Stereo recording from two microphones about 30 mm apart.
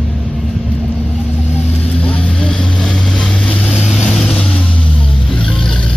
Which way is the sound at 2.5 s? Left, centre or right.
Centre.